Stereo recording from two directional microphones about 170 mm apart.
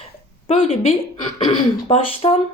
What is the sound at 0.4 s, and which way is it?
Speech, 35° left (ahead or behind).